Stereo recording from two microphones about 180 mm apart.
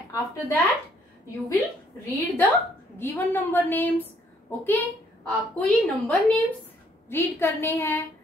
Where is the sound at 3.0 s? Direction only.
10° left (ahead or behind).